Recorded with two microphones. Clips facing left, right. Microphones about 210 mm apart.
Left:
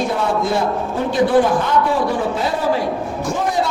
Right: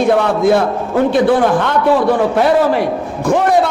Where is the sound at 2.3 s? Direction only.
70° right (ahead or behind).